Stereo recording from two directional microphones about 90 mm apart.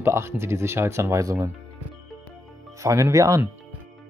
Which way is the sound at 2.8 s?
35° right (ahead or behind).